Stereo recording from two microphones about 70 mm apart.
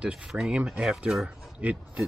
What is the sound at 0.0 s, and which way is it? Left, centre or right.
A man's voice, centre.